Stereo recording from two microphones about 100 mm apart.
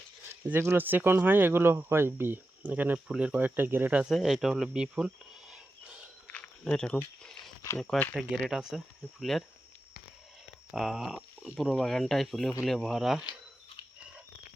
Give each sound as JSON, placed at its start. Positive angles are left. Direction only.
{"t": 0.6, "sound": "speech", "side_deg": -20}
{"t": 4.1, "sound": "speech", "side_deg": 0}
{"t": 6.2, "sound": "a sound", "side_deg": 10}
{"t": 7.9, "sound": "speech", "side_deg": 0}
{"t": 10.7, "sound": "speech", "side_deg": 0}